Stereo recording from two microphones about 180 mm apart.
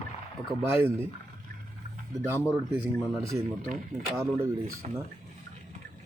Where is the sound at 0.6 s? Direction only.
10° right (ahead or behind).